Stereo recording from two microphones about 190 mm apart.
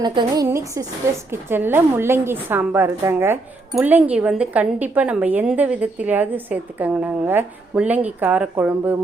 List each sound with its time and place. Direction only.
0.0 s a woman's voice: 25° right (ahead or behind)